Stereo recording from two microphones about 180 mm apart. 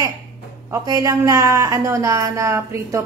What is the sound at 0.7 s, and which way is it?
Speech, 20° right (ahead or behind).